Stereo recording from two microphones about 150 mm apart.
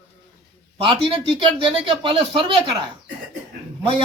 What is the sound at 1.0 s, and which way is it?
Speech, 35° right (ahead or behind).